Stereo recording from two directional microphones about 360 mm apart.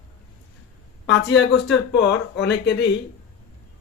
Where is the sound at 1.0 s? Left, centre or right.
Left.